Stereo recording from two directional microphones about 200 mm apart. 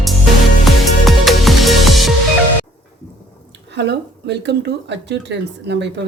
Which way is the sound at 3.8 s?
60° right (ahead or behind).